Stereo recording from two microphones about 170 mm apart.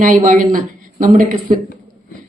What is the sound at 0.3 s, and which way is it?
Speech, 50° right (ahead or behind).